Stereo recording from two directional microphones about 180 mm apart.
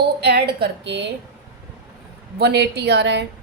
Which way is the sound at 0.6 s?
70° right (ahead or behind).